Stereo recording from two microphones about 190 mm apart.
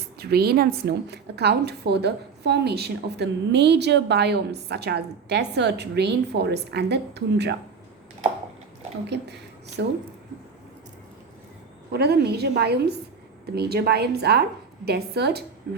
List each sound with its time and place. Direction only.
0.2 s a woman's voice: 55° right (ahead or behind)
9.8 s speech: 70° right (ahead or behind)
11.9 s a woman's voice: 60° right (ahead or behind)